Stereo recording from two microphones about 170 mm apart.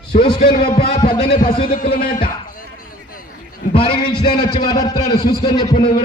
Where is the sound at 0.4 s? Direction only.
60° left (ahead or behind).